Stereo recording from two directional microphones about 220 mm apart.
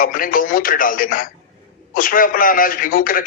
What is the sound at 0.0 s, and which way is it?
A man's voice, 40° left (ahead or behind).